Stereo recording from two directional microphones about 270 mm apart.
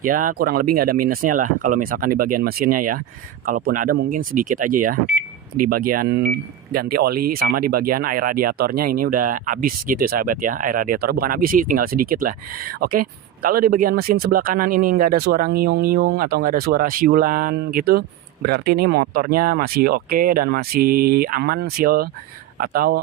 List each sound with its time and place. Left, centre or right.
0.0 s speech: right